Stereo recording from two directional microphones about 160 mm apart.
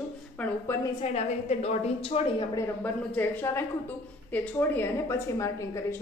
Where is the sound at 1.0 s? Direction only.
40° left (ahead or behind).